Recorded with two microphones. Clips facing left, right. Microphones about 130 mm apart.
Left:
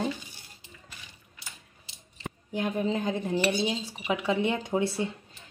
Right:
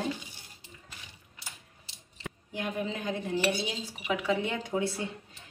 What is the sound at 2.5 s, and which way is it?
Speech, 30° left (ahead or behind).